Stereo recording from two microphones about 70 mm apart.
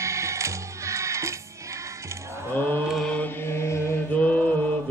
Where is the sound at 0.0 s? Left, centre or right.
Right.